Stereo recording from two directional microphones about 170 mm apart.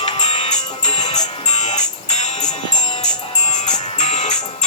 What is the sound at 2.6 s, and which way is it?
Music, 25° left (ahead or behind).